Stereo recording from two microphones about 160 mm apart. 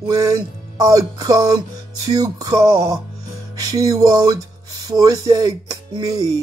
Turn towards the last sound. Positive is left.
turn(degrees=-25)  # may be behind; listen again after turning